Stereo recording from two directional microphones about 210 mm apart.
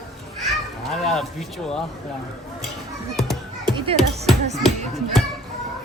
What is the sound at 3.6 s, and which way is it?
Music, 25° right (ahead or behind).